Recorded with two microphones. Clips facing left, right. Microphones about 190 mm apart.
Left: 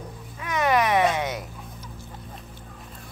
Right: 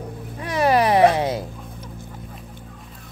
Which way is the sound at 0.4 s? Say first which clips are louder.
Right 4 dB; 35° right (ahead or behind).